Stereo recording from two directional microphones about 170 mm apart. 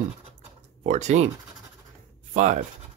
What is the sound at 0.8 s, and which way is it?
Speech, 45° right (ahead or behind).